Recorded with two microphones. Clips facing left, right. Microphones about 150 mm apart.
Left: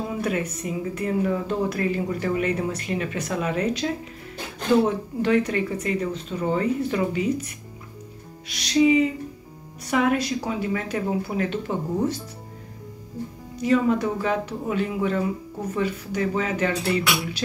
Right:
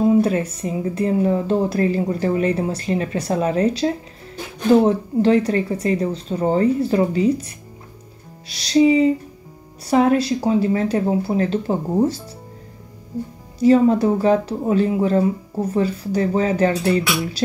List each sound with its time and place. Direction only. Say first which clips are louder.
0.1 s speech: right 9 dB; 30° right (ahead or behind)
13.6 s speech: right 7 dB; 35° right (ahead or behind)